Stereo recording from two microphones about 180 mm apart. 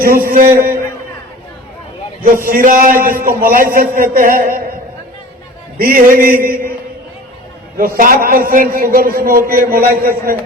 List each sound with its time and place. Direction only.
0.0 s a man's voice: 55° right (ahead or behind)
2.2 s a man's voice: 50° right (ahead or behind)
5.8 s a man's voice: 50° right (ahead or behind)
7.8 s a man's voice: 50° right (ahead or behind)